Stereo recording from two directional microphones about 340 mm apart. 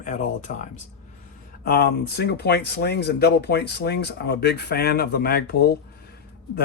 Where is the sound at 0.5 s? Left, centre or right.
Left.